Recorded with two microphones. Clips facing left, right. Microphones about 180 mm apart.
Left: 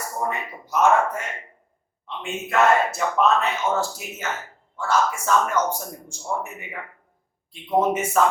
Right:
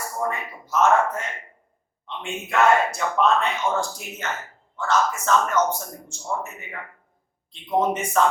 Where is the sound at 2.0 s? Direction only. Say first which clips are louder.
Left 1 dB; centre (ahead or behind).